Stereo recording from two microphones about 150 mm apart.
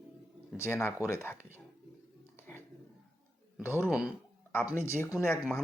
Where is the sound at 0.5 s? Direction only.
15° left (ahead or behind).